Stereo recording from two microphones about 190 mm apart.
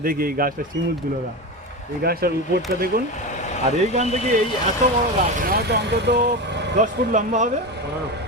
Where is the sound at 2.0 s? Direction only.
50° right (ahead or behind).